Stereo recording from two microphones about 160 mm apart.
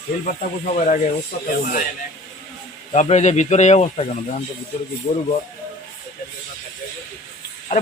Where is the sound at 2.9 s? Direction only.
45° left (ahead or behind).